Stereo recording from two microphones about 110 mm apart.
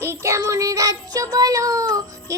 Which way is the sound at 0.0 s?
25° right (ahead or behind).